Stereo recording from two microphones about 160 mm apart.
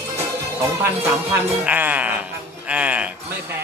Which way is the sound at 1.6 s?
10° right (ahead or behind).